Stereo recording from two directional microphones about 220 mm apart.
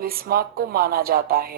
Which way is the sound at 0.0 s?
45° right (ahead or behind).